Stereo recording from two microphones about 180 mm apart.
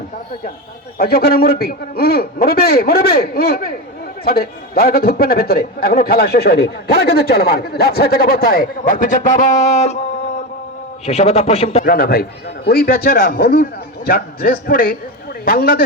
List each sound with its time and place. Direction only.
0.9 s a man's voice: 55° left (ahead or behind); by 10.0 s 40° left (ahead or behind)
11.0 s a man's voice: 35° left (ahead or behind)
11.9 s a man's voice: 55° left (ahead or behind)